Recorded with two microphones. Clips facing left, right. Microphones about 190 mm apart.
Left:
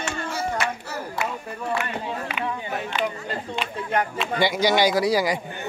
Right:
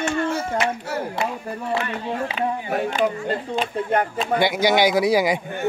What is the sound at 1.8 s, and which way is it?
Speech, 30° right (ahead or behind).